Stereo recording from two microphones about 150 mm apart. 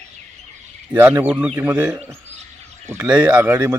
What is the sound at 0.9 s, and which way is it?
Speech, 10° right (ahead or behind).